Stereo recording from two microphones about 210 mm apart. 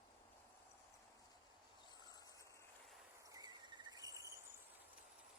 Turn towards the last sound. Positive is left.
turn(degrees=-15)  # may be behind; listen again after turning